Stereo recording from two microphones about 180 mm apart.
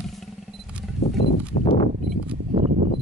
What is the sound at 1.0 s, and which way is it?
Horse, 35° left (ahead or behind).